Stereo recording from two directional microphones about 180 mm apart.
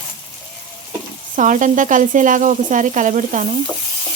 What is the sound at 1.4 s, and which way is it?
Sizzle, 45° right (ahead or behind).